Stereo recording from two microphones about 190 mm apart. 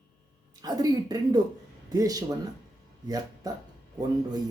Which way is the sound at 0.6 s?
20° right (ahead or behind).